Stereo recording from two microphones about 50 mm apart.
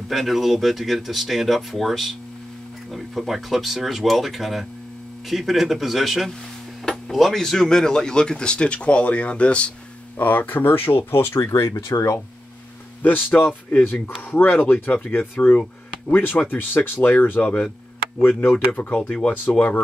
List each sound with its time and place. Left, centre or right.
0.1 s speech: centre; by 9.7 s left
10.1 s speech: left
11.6 s speech: left
13.0 s speech: left
18.8 s speech: left